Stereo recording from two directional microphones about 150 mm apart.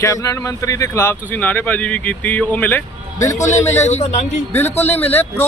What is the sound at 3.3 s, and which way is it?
Speech, 50° left (ahead or behind).